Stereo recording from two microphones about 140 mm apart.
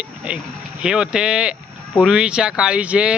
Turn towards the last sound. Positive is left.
turn(degrees=-5)  # may be behind; listen again after turning